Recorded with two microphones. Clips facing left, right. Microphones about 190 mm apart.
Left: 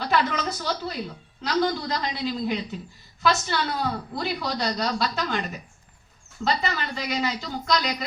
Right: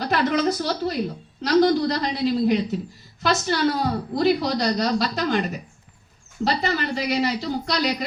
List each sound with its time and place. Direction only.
0.0 s a woman's voice: 40° right (ahead or behind)